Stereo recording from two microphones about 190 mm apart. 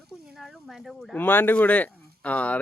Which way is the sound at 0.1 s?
Centre (ahead or behind).